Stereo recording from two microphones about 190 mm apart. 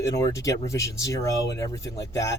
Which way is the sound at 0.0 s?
15° left (ahead or behind).